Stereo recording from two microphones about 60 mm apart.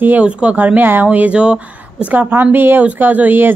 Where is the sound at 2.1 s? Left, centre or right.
Right.